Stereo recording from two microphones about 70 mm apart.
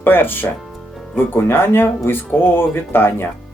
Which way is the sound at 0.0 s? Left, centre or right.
Left.